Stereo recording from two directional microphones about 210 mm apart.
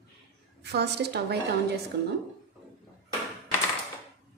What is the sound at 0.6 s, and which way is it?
Speech, 50° right (ahead or behind).